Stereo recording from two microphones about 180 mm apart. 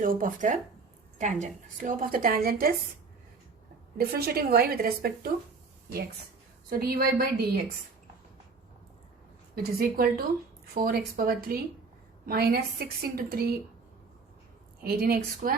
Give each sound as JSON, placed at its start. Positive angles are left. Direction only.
{"t": 0.0, "sound": "a woman's voice", "side_deg": -50}
{"t": 3.9, "sound": "a woman's voice", "side_deg": -60}
{"t": 6.7, "sound": "a woman's voice", "side_deg": -55}
{"t": 9.8, "sound": "a woman's voice", "side_deg": -55}
{"t": 14.8, "sound": "a woman's voice", "side_deg": -60}